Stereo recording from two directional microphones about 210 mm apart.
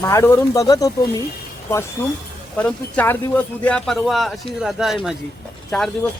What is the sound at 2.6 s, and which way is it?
Speech, 5° left (ahead or behind).